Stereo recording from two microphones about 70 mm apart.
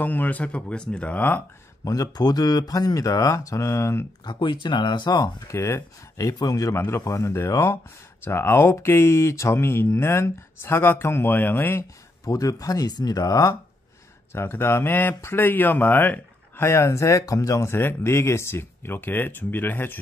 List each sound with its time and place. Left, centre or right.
0.0 s speech: left
1.9 s speech: left
4.2 s speech: left
5.5 s speech: left
6.1 s speech: left
12.3 s speech: left
14.3 s speech: left